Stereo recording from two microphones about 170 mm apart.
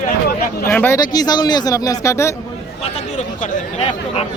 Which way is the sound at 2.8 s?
40° left (ahead or behind).